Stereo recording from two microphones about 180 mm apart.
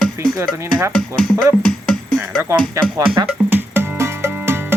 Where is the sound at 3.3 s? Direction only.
10° right (ahead or behind).